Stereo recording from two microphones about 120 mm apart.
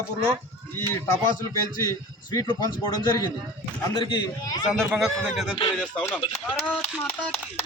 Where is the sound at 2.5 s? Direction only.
40° left (ahead or behind).